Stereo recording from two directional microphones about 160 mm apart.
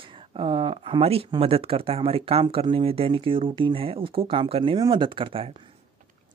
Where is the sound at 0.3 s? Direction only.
35° right (ahead or behind).